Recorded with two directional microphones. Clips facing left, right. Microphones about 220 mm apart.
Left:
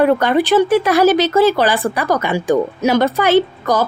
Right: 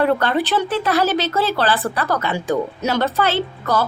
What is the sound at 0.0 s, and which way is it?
Speech, 15° left (ahead or behind).